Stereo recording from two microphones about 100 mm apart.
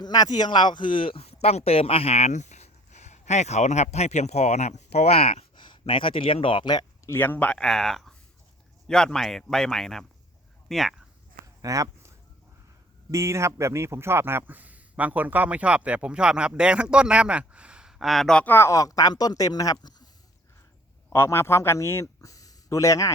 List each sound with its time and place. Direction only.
0.0 s speech: 40° left (ahead or behind); by 2.6 s 90° left
3.8 s speech: 90° left
5.5 s speech: 55° left (ahead or behind)
7.0 s speech: 25° left (ahead or behind); by 10.9 s centre (ahead or behind)
11.6 s a sound: 35° right (ahead or behind)
13.1 s speech: 30° right (ahead or behind); by 18.4 s 5° left (ahead or behind)
18.4 s speech: 25° left (ahead or behind); by 20.1 s 40° left (ahead or behind)
21.1 s speech: 25° left (ahead or behind)